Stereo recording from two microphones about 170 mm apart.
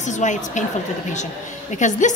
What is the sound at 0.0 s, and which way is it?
Speech, 45° left (ahead or behind).